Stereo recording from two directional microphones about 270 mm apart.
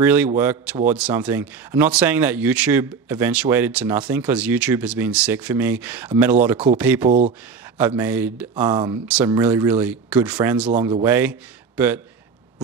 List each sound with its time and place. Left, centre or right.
0.0 s speech: centre
7.1 s speech: right
7.7 s speech: centre